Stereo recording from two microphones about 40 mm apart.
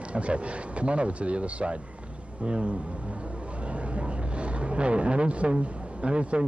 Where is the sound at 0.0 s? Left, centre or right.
Right.